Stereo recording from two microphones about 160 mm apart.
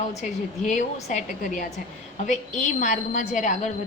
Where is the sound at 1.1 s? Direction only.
50° left (ahead or behind).